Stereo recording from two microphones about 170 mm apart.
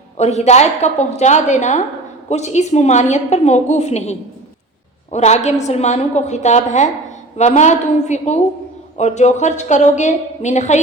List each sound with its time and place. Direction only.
0.2 s a woman's voice: 40° left (ahead or behind)